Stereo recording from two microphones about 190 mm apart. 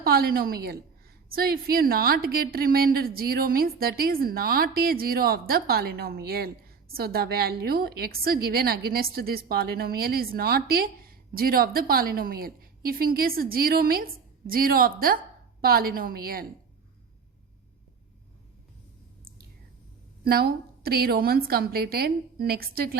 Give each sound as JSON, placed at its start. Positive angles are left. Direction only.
{"t": 0.0, "sound": "a woman's voice", "side_deg": -55}
{"t": 20.2, "sound": "a woman's voice", "side_deg": -55}